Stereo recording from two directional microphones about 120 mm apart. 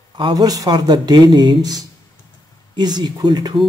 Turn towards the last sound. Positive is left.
turn(degrees=-35)  # may be behind; listen again after turning